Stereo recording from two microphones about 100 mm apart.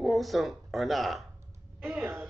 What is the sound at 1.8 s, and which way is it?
Speech, 25° right (ahead or behind).